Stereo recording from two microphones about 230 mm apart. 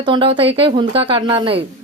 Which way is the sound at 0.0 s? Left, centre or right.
Right.